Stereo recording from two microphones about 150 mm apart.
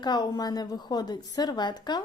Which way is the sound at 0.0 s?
30° left (ahead or behind).